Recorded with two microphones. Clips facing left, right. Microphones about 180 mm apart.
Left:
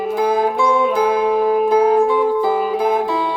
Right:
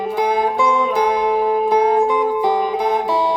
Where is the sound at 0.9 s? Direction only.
5° left (ahead or behind).